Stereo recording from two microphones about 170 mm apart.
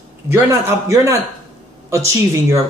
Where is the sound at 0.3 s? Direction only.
15° right (ahead or behind).